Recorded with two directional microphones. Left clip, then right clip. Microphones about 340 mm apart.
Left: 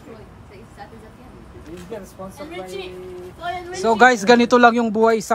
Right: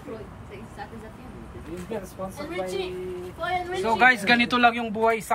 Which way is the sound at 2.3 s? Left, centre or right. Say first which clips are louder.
Right 2 dB; centre.